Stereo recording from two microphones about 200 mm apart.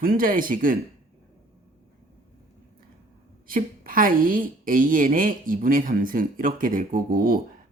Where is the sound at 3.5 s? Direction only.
45° right (ahead or behind).